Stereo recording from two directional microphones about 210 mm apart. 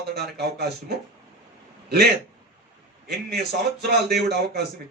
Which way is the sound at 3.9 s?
50° right (ahead or behind).